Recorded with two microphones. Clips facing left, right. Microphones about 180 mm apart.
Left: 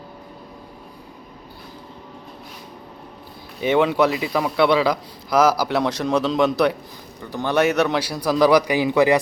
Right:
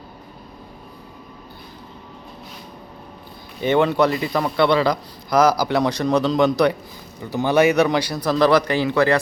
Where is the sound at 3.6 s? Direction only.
5° left (ahead or behind).